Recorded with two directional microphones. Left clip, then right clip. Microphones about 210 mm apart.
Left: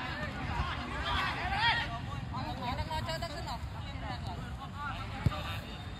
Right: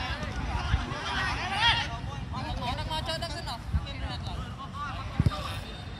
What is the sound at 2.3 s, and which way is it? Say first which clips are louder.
Vehicle: right 4 dB; 40° right (ahead or behind).